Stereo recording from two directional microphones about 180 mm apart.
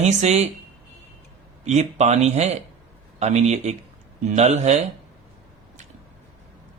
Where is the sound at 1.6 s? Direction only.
40° right (ahead or behind).